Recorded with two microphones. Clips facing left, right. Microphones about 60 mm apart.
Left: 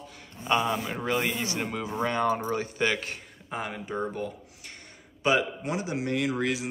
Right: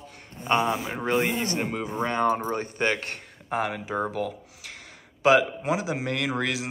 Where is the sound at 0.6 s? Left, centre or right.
Centre.